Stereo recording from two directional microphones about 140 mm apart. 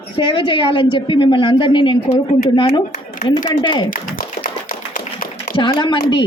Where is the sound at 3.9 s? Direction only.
75° left (ahead or behind).